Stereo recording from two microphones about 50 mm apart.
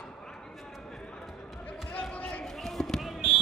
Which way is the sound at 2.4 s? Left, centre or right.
Centre.